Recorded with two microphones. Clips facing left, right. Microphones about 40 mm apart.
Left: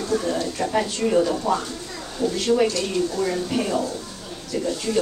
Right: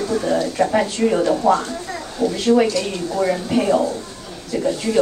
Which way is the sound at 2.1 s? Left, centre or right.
Centre.